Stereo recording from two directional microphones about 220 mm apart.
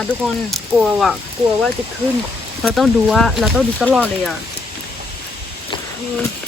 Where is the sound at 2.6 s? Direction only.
Centre (ahead or behind).